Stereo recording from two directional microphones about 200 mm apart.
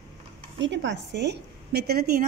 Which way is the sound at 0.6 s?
60° right (ahead or behind).